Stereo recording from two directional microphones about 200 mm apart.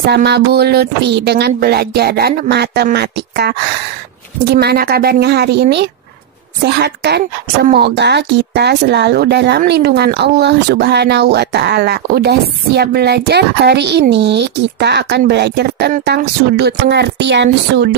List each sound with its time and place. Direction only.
0.0 s a woman's voice: 55° right (ahead or behind)